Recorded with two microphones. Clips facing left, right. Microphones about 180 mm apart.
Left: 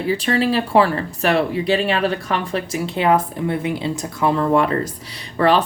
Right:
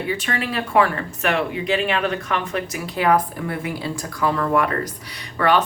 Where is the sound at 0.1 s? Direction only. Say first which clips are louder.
Left 11 dB; 30° left (ahead or behind).